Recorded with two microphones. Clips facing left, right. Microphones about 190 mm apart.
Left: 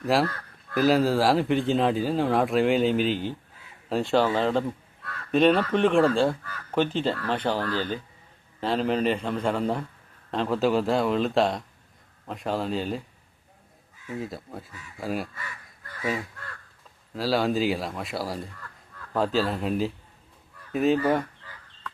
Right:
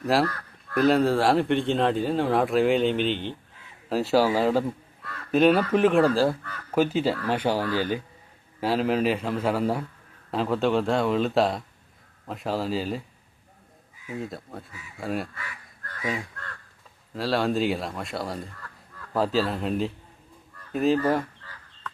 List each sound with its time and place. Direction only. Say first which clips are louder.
0.0 s speech: even; centre (ahead or behind)
14.2 s speech: even; centre (ahead or behind)
17.2 s speech: even; centre (ahead or behind)